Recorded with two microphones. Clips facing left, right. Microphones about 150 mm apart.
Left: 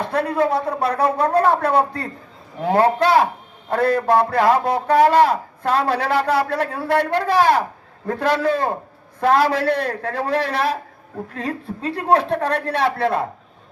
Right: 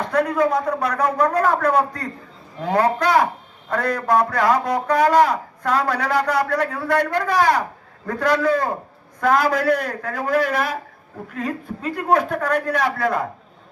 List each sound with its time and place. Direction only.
0.0 s a man's voice: 25° left (ahead or behind)